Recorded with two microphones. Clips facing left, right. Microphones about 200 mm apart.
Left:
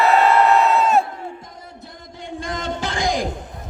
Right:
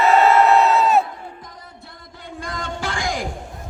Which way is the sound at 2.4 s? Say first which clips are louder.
Left 2 dB; 20° left (ahead or behind).